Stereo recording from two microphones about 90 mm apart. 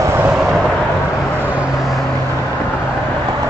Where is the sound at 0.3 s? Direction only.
5° right (ahead or behind).